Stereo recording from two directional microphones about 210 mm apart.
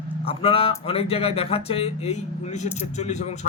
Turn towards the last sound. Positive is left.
turn(degrees=35)  # may be behind; listen again after turning